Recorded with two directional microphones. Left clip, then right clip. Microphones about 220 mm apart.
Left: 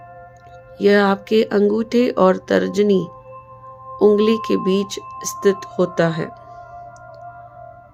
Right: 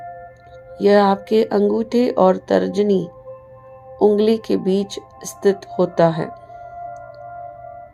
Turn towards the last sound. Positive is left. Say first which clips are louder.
# right 3 dB
turn(degrees=15)  # may be behind; listen again after turning